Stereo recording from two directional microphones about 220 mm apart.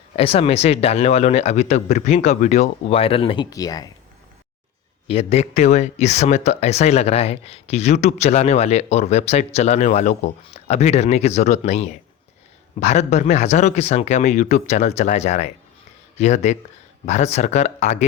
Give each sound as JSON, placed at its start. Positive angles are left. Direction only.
{"t": 0.2, "sound": "speech", "side_deg": 25}
{"t": 5.0, "sound": "speech", "side_deg": 25}